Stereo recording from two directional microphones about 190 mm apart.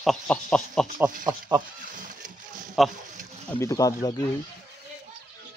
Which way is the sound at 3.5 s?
15° left (ahead or behind).